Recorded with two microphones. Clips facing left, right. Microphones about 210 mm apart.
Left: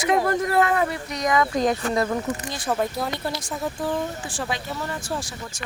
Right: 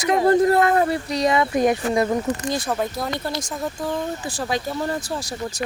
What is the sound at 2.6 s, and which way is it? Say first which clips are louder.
Speech: even; centre (ahead or behind).